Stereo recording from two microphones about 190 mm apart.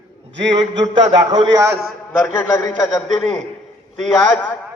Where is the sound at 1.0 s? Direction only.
20° right (ahead or behind).